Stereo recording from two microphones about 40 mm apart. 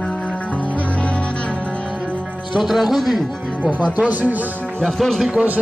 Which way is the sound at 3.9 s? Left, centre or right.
Right.